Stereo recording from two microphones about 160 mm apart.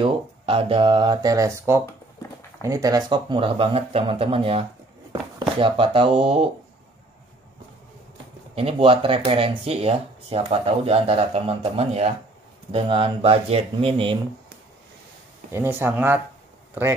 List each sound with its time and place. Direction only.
0.0 s speech: 35° right (ahead or behind)
8.5 s speech: 35° right (ahead or behind)
15.5 s speech: 15° right (ahead or behind)